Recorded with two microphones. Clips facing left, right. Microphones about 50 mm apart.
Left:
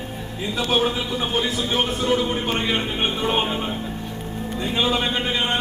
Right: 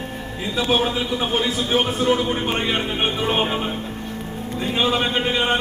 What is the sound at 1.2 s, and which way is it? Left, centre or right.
A man's voice, centre.